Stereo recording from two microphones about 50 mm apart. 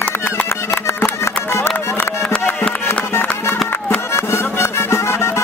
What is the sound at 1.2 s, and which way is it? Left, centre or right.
Music, left.